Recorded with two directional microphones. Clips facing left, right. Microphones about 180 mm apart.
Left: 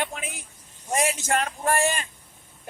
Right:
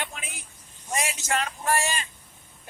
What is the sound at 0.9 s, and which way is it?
Speech, 50° left (ahead or behind).